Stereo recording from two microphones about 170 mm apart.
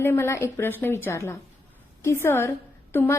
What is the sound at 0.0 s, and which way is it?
A woman's voice, 15° left (ahead or behind).